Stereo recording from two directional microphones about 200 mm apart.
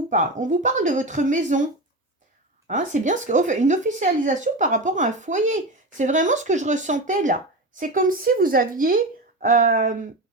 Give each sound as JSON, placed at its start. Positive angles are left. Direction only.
{"t": 0.1, "sound": "a woman's voice", "side_deg": -40}